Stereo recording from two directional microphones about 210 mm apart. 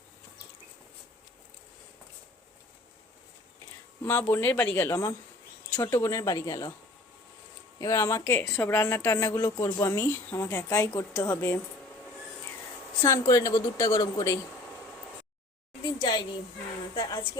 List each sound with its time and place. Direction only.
4.0 s speech: 10° left (ahead or behind)
7.8 s speech: 15° left (ahead or behind)
13.0 s speech: 15° left (ahead or behind)
16.0 s speech: 20° left (ahead or behind)